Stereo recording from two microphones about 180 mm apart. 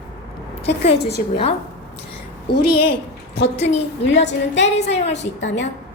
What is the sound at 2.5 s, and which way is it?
A woman's voice, 65° left (ahead or behind).